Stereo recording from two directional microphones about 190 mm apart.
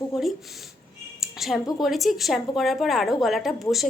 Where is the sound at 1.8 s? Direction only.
Centre (ahead or behind).